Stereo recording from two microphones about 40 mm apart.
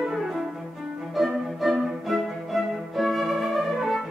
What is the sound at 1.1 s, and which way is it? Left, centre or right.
Music, centre.